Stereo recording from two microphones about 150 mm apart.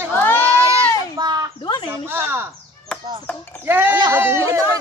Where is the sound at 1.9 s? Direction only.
15° right (ahead or behind).